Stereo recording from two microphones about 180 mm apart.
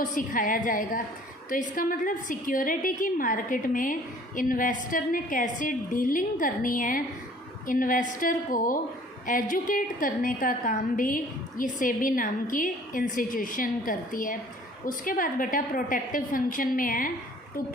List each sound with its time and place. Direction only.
0.0 s a woman's voice: 50° left (ahead or behind)